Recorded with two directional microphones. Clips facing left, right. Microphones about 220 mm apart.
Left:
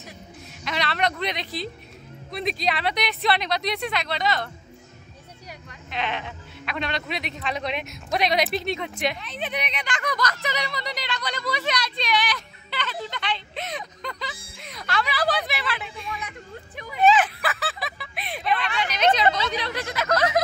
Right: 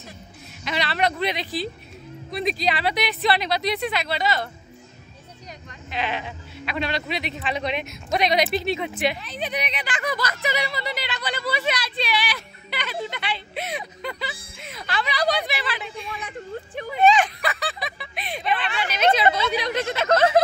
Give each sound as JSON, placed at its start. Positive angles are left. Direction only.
{"t": 0.7, "sound": "a man's voice", "side_deg": 0}
{"t": 5.9, "sound": "speech", "side_deg": -5}
{"t": 16.1, "sound": "speech", "side_deg": -30}
{"t": 17.0, "sound": "speech", "side_deg": 5}
{"t": 19.7, "sound": "speech", "side_deg": -25}